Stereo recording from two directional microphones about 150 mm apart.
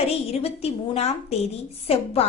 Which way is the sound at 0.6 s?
45° left (ahead or behind).